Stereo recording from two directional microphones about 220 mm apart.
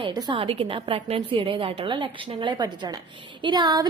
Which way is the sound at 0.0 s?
20° right (ahead or behind).